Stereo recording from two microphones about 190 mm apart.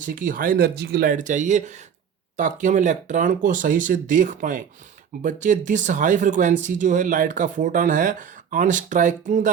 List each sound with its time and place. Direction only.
0.0 s speech: 45° right (ahead or behind)